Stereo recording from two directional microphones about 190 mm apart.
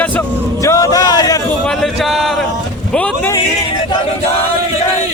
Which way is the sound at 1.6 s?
Centre (ahead or behind).